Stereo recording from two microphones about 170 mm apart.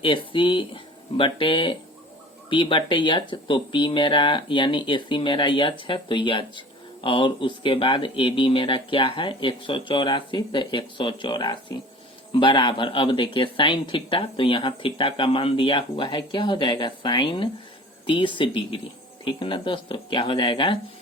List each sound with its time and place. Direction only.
0.0 s speech: 30° left (ahead or behind)